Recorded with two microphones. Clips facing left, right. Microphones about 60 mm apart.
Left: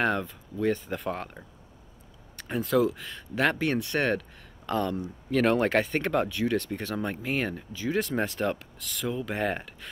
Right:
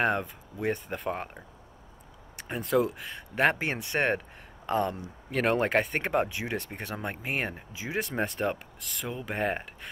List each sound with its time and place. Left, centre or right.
0.0 s speech: centre
3.3 s speech: right; by 5.9 s centre
5.9 s speech: centre